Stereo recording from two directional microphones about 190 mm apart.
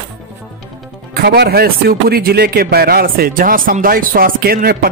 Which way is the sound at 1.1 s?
60° right (ahead or behind).